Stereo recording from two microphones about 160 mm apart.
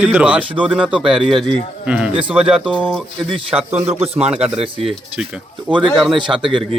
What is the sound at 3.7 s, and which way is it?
Speech, 15° right (ahead or behind).